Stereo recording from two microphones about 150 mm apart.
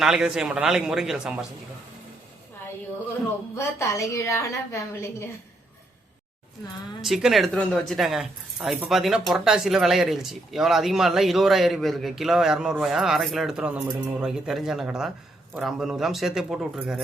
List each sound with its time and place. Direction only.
0.0 s speech: 5° right (ahead or behind)
3.5 s a woman's voice: 20° left (ahead or behind)
7.0 s speech: centre (ahead or behind)